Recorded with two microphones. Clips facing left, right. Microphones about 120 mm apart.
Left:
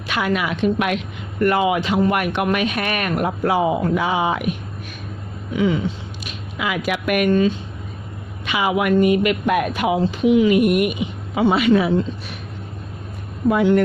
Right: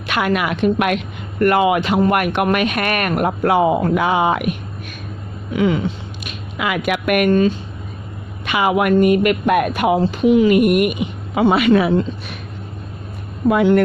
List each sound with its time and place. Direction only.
0.1 s speech: 60° right (ahead or behind)
5.5 s speech: 65° right (ahead or behind)
13.5 s speech: 65° right (ahead or behind)